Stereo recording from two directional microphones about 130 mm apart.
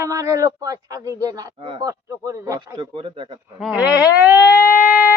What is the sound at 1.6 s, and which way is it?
Speech, 40° right (ahead or behind).